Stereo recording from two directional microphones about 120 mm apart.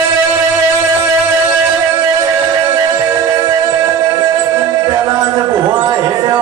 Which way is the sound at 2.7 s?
30° right (ahead or behind).